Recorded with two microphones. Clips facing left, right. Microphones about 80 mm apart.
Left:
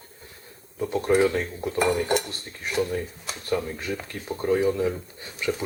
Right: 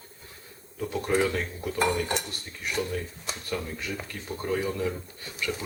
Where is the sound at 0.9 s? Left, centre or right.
Centre.